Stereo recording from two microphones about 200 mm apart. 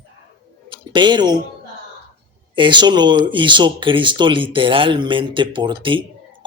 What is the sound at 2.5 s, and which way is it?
Speech, 25° right (ahead or behind).